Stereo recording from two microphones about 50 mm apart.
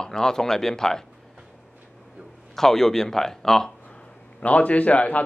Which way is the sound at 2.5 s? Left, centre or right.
Centre.